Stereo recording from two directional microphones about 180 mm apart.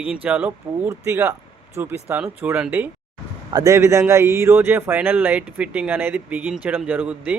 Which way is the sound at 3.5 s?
20° right (ahead or behind).